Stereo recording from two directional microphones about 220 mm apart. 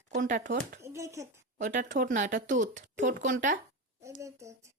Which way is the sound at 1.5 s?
35° right (ahead or behind).